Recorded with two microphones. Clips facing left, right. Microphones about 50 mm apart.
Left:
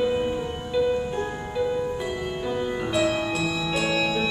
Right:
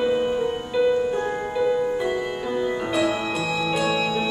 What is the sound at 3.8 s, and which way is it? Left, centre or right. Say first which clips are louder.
Music: even; centre.